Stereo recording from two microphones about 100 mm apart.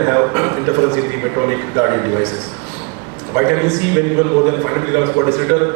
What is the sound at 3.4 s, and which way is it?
A man's voice, 30° right (ahead or behind).